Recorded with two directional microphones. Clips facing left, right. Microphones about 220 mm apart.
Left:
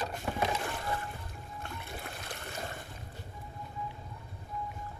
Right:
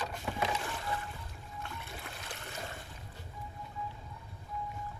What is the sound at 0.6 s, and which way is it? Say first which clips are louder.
Rowboat: left 2 dB; 55° left (ahead or behind).